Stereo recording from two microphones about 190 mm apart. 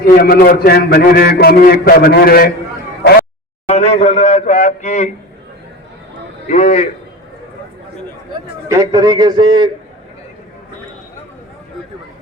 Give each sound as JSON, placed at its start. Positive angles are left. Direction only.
{"t": 0.0, "sound": "a man's voice", "side_deg": 55}
{"t": 3.7, "sound": "a man's voice", "side_deg": 35}
{"t": 6.5, "sound": "a man's voice", "side_deg": 35}
{"t": 8.7, "sound": "a man's voice", "side_deg": -20}